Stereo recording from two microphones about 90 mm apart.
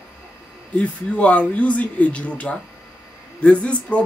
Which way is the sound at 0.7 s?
15° left (ahead or behind).